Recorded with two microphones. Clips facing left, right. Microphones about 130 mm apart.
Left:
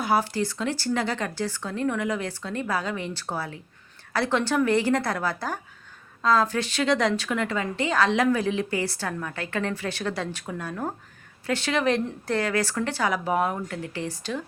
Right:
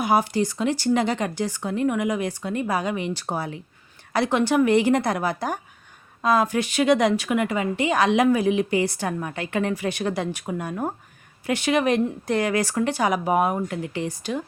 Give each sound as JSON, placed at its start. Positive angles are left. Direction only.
{"t": 0.0, "sound": "a woman's voice", "side_deg": -15}